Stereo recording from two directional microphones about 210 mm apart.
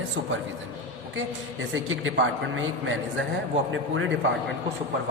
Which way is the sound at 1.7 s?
65° right (ahead or behind).